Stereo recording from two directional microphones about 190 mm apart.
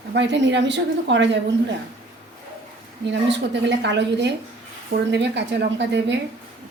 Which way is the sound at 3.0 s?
70° right (ahead or behind).